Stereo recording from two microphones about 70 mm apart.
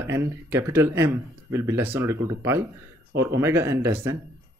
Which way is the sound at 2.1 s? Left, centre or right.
Right.